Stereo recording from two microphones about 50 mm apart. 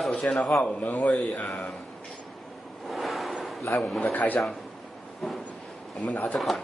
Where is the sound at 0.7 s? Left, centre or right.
Left.